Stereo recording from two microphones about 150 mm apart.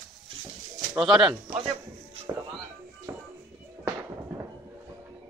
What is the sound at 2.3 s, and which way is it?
Speech, 20° right (ahead or behind).